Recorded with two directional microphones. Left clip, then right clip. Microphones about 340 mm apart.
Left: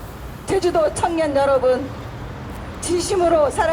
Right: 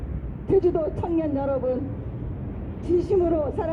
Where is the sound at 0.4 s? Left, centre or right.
Left.